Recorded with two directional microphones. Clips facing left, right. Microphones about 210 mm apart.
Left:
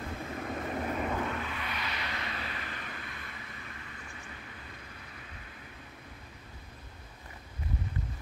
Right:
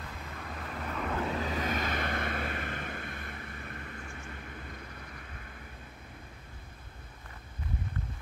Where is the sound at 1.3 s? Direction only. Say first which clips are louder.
Right 5 dB; 40° right (ahead or behind).